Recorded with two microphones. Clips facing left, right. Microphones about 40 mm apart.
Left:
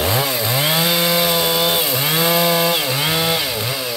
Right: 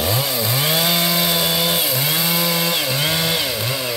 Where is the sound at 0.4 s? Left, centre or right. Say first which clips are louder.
Left 1 dB; centre.